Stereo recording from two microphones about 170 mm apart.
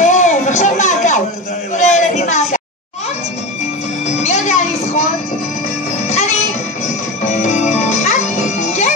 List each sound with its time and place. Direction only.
0.0 s a sound: 45° left (ahead or behind)
4.2 s music: 45° left (ahead or behind)
6.0 s music: 40° left (ahead or behind)